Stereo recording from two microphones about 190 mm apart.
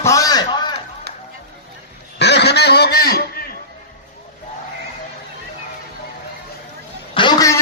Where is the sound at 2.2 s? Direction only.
60° left (ahead or behind).